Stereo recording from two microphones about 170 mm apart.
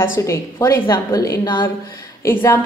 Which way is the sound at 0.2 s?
20° left (ahead or behind).